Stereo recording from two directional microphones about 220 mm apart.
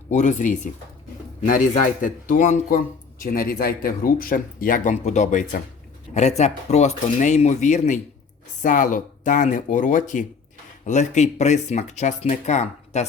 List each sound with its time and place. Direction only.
0.1 s speech: 35° left (ahead or behind)